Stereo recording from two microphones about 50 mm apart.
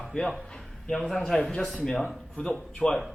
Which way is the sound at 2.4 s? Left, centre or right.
Left.